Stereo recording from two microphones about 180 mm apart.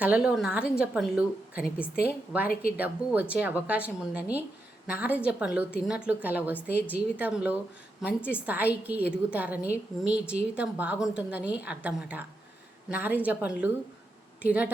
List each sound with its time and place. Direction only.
0.0 s a woman's voice: 5° right (ahead or behind)